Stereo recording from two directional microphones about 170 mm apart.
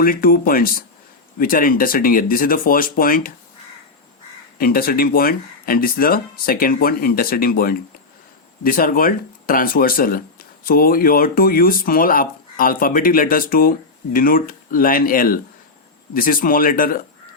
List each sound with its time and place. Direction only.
0.0 s speech: 55° left (ahead or behind)
4.5 s speech: 60° left (ahead or behind)